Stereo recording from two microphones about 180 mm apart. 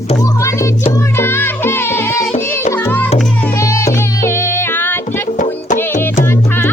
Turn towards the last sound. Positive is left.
turn(degrees=10)  # may be behind; listen again after turning